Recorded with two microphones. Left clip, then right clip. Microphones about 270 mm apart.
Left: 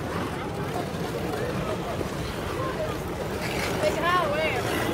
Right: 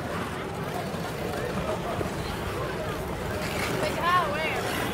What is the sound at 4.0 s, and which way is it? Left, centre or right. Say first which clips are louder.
Vehicle: right 2 dB; left.